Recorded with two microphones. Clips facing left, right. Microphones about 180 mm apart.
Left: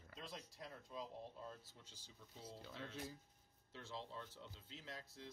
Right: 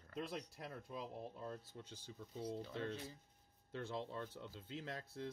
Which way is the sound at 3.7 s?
55° right (ahead or behind).